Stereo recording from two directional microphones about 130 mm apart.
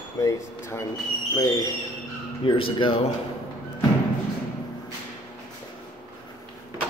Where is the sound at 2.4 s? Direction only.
40° left (ahead or behind).